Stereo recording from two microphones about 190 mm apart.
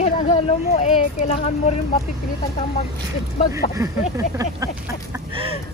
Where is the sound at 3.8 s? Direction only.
15° right (ahead or behind).